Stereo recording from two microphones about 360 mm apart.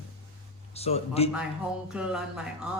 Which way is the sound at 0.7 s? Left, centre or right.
Centre.